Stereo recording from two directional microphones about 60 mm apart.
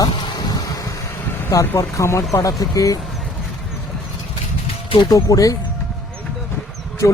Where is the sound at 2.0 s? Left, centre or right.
Left.